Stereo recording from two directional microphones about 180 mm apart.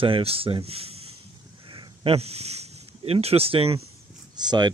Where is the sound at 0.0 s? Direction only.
30° right (ahead or behind).